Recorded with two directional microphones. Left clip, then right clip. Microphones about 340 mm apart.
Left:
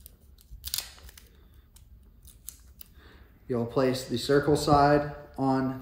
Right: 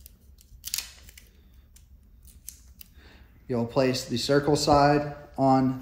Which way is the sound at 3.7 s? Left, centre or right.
Centre.